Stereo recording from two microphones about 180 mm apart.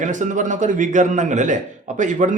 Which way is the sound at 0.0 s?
45° right (ahead or behind).